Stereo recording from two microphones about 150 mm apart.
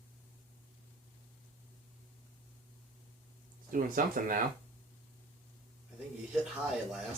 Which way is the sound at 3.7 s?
65° right (ahead or behind).